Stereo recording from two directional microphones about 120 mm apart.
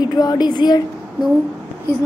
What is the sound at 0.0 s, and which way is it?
Speech, 35° left (ahead or behind).